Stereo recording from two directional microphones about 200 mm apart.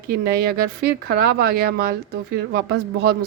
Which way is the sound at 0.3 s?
50° right (ahead or behind).